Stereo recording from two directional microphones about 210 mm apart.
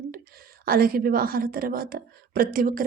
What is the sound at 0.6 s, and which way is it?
A woman's voice, 45° right (ahead or behind).